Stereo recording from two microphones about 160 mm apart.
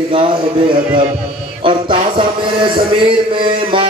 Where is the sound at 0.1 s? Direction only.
30° right (ahead or behind).